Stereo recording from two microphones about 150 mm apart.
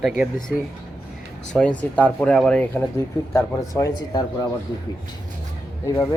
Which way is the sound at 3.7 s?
25° left (ahead or behind).